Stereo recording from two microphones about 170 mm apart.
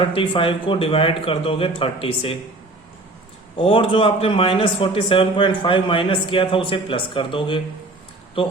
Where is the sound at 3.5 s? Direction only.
35° left (ahead or behind).